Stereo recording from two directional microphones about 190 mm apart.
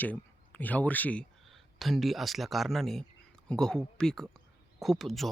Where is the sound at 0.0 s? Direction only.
10° left (ahead or behind).